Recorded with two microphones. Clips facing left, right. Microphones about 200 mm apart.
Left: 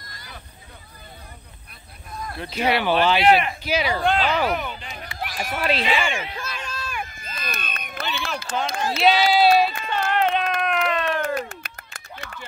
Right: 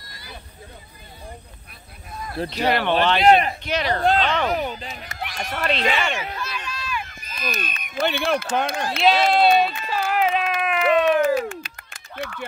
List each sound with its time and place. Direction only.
2.4 s speech: 35° right (ahead or behind)
2.7 s speech: 5° left (ahead or behind)
4.5 s speech: 35° right (ahead or behind)
5.2 s speech: 5° left (ahead or behind)
6.4 s run: 45° left (ahead or behind)
8.0 s speech: 55° right (ahead or behind)
9.0 s speech: centre (ahead or behind)
9.8 s run: 5° right (ahead or behind)
10.6 s a sound: 5° right (ahead or behind)
11.6 s a sound: 55° left (ahead or behind)